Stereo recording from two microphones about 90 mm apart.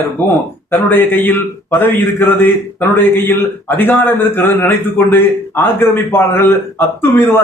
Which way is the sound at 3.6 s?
25° left (ahead or behind).